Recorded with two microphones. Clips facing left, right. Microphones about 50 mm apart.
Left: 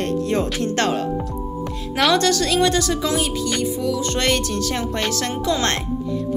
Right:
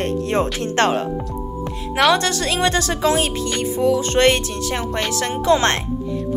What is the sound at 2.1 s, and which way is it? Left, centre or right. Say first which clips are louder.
Speech: left 2 dB; right.